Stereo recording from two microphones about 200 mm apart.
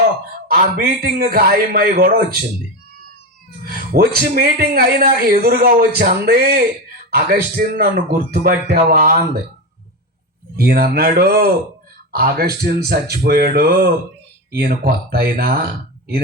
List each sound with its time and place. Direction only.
0.4 s speech: 50° right (ahead or behind)
3.7 s speech: 50° right (ahead or behind)
10.6 s speech: 50° right (ahead or behind)